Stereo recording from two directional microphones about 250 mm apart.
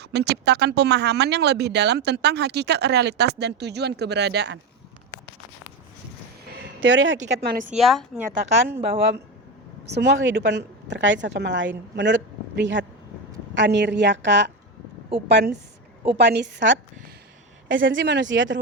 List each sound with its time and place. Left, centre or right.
0.0 s speech: right
6.8 s a woman's voice: right
7.7 s speech: centre
9.9 s a woman's voice: right